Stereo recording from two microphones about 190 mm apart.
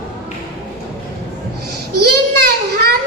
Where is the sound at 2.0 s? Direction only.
55° right (ahead or behind).